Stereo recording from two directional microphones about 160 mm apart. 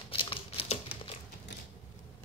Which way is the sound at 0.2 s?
35° left (ahead or behind).